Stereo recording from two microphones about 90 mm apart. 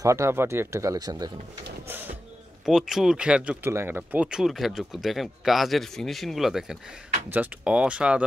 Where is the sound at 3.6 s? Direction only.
25° right (ahead or behind).